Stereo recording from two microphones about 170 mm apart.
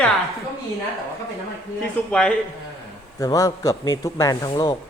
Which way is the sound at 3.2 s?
20° left (ahead or behind).